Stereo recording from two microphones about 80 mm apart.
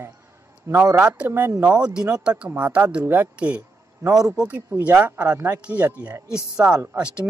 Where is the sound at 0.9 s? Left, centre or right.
Centre.